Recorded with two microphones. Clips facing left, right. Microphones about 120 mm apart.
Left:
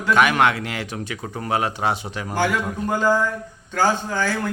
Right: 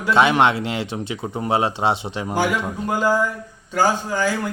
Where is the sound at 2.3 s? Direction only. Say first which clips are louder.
Right 1 dB; 10° right (ahead or behind).